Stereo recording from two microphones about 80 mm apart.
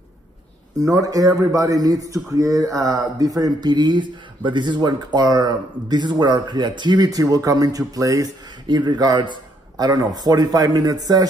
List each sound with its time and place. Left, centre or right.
0.7 s speech: right
8.6 s speech: right